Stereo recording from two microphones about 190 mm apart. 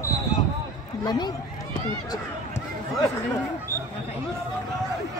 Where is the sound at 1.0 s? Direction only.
20° left (ahead or behind).